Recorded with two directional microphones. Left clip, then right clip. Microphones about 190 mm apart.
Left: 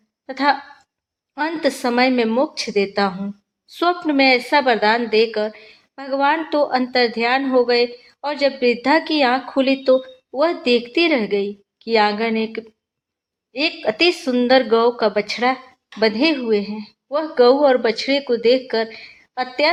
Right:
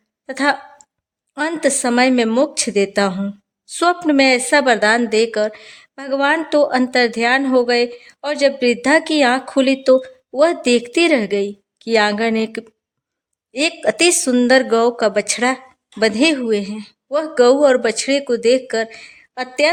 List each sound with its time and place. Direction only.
0.3 s speech: 35° right (ahead or behind)